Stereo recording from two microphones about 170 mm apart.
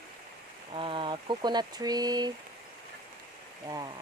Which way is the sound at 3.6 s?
20° right (ahead or behind).